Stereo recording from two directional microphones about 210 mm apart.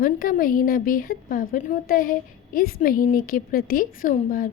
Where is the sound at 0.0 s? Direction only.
45° left (ahead or behind).